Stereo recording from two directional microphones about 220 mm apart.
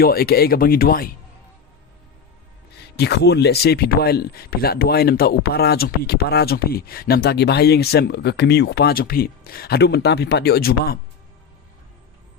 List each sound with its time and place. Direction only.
0.0 s speech: 45° left (ahead or behind)
2.9 s speech: 50° left (ahead or behind)